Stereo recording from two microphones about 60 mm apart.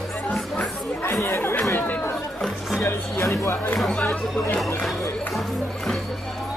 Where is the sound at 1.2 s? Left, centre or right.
Left.